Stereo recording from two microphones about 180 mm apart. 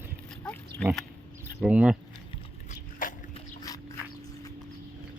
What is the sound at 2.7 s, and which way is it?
Biting, 50° left (ahead or behind).